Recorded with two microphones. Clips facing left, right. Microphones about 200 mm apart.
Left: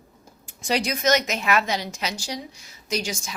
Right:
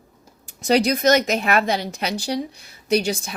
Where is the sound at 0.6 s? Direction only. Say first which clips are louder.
Right 6 dB; 40° right (ahead or behind).